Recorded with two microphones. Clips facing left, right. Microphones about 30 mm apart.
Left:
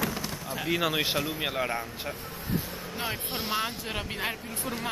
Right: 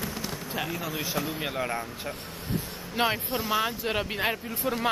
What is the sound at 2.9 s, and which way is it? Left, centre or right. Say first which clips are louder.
Speech: right 8 dB; right.